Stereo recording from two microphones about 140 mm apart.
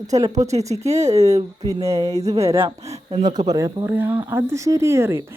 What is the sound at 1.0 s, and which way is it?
Speech, 50° right (ahead or behind).